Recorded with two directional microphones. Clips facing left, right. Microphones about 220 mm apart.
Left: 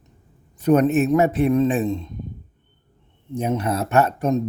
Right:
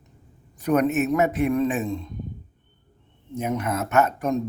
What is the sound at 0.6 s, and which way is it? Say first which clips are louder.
Speech: left 4 dB; 30° left (ahead or behind).